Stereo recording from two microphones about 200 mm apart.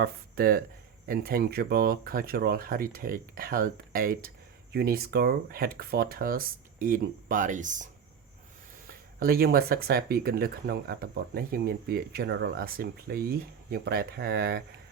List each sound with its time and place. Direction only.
0.0 s speech: 50° right (ahead or behind)
8.9 s speech: 50° right (ahead or behind)